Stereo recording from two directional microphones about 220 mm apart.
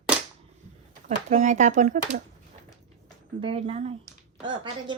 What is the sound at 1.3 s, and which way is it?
Speech, 35° right (ahead or behind).